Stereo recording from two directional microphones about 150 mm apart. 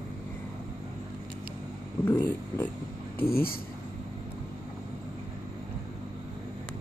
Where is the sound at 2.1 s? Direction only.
15° left (ahead or behind).